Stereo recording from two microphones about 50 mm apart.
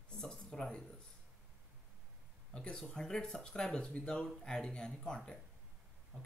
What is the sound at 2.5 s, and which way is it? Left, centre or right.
Speech, centre.